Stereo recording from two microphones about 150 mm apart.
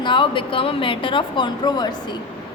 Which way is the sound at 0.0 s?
35° left (ahead or behind).